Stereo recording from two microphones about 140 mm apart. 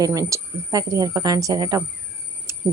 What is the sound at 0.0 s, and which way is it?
Speech, 25° right (ahead or behind).